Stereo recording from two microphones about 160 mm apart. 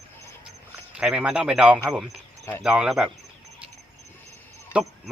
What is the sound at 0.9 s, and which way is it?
A man's voice, 5° right (ahead or behind).